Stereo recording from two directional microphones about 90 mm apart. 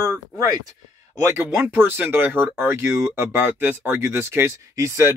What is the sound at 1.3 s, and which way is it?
Speech, 25° right (ahead or behind).